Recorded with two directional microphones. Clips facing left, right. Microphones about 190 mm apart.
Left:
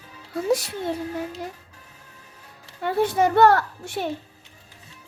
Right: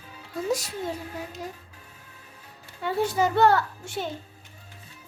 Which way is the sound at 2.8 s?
55° left (ahead or behind).